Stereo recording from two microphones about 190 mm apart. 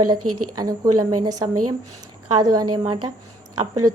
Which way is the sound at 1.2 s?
20° right (ahead or behind).